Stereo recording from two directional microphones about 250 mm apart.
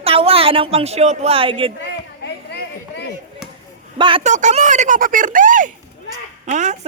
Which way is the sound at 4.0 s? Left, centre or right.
Right.